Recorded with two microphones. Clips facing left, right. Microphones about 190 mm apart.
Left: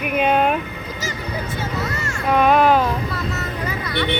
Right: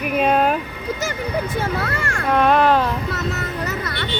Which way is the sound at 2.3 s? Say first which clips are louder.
Left 1 dB; 5° left (ahead or behind).